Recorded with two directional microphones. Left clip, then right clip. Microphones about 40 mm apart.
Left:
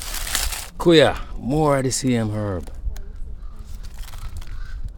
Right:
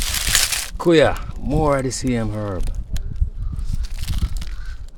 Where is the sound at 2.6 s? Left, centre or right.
Right.